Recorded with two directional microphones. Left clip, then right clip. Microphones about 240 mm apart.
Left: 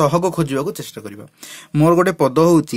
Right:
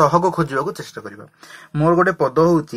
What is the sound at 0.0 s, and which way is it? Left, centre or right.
Speech, left.